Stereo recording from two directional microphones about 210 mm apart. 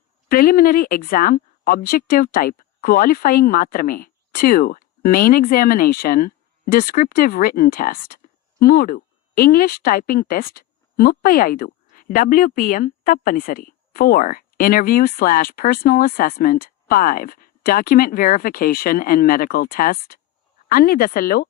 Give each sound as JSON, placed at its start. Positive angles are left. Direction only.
{"t": 0.3, "sound": "speech", "side_deg": 45}